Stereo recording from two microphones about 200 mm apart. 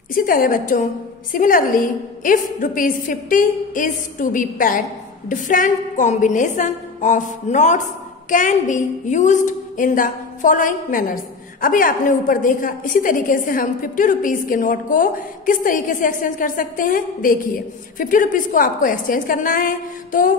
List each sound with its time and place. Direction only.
0.1 s a woman's voice: 45° left (ahead or behind)